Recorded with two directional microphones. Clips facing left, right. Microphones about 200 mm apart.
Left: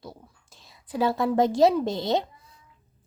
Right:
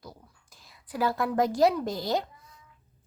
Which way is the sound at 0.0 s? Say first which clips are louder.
Left 4 dB; 25° left (ahead or behind).